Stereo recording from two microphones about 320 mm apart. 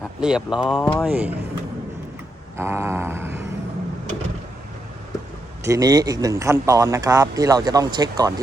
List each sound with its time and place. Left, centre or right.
0.2 s speech: centre
2.6 s speech: centre
5.6 s speech: centre